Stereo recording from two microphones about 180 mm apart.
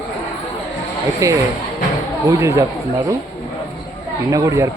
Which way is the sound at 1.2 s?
15° right (ahead or behind).